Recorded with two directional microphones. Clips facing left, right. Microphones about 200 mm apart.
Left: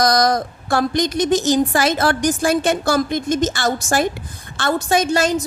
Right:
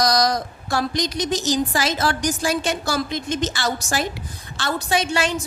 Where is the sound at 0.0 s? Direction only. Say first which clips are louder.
Left 3 dB; 55° left (ahead or behind).